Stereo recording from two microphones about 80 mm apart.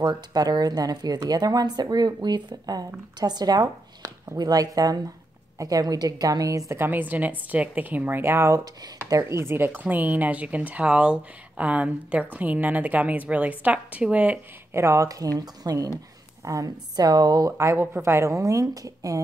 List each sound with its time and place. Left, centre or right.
0.0 s speech: right
3.6 s a sound: right
4.4 s speech: right
6.7 s speech: right
14.7 s speech: right
17.6 s speech: right